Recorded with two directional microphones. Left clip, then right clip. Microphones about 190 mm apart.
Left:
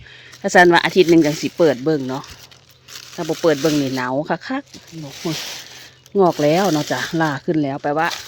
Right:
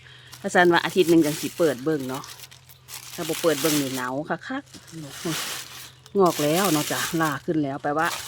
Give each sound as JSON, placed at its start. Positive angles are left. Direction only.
{"t": 0.4, "sound": "speech", "side_deg": 35}
{"t": 6.1, "sound": "speech", "side_deg": 25}